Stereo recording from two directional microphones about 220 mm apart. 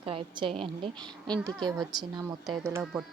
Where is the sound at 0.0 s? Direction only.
25° right (ahead or behind).